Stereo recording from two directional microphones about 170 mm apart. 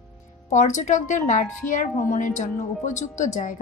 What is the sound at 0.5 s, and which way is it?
A woman's voice, 45° left (ahead or behind).